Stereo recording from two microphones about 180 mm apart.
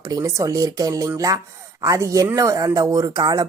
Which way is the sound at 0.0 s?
20° right (ahead or behind).